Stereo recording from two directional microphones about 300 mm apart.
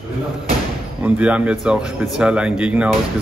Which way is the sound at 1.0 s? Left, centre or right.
Centre.